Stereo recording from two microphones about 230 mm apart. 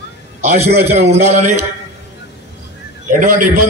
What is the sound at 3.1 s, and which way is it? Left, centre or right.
Speech, right.